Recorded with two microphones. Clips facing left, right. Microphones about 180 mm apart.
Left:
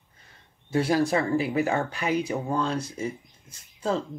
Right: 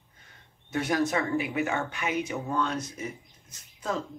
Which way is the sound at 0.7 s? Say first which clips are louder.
Left 4 dB; 30° left (ahead or behind).